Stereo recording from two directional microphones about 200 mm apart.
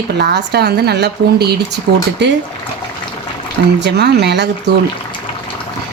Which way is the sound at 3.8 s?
55° right (ahead or behind).